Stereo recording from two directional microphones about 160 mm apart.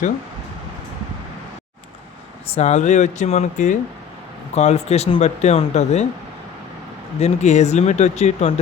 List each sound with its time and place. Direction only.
2.5 s speech: 45° left (ahead or behind)
7.2 s speech: 45° left (ahead or behind)